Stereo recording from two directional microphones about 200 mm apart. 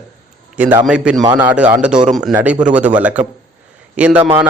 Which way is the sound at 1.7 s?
5° right (ahead or behind).